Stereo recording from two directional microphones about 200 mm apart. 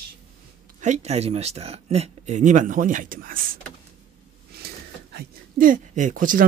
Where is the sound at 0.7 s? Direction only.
35° right (ahead or behind).